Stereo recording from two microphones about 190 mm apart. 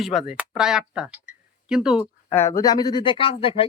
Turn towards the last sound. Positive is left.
turn(degrees=30)  # may be behind; listen again after turning